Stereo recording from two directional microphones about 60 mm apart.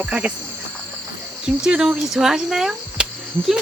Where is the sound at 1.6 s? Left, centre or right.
Centre.